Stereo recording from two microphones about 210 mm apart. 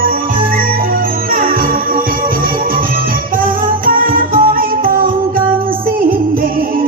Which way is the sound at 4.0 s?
40° right (ahead or behind).